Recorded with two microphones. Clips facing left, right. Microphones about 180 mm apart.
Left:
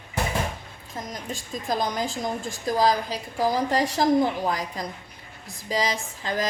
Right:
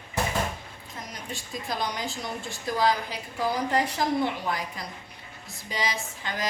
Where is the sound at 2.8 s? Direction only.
40° left (ahead or behind).